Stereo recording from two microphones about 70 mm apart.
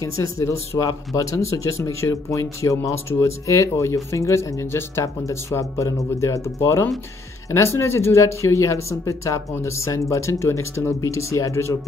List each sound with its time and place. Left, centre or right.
0.0 s speech: left